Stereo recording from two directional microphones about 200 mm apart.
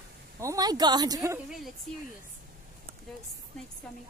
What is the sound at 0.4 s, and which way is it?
A woman's voice, 15° right (ahead or behind).